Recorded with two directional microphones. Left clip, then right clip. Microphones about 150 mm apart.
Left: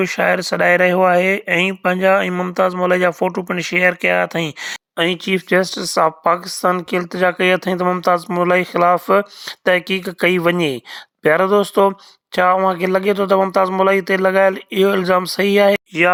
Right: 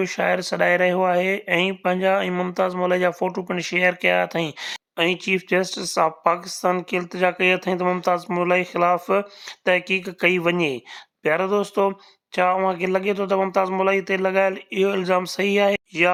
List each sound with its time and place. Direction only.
0.0 s speech: 35° left (ahead or behind)